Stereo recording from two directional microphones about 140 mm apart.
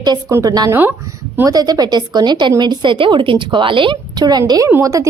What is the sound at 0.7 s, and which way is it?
A woman's voice, 15° right (ahead or behind).